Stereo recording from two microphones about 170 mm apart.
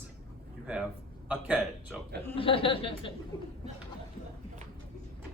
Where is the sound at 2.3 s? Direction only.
30° left (ahead or behind).